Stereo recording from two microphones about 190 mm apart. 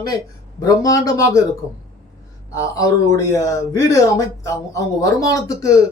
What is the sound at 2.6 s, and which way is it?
A man's voice, 15° left (ahead or behind).